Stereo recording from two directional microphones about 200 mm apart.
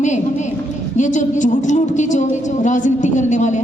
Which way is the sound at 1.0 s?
40° left (ahead or behind).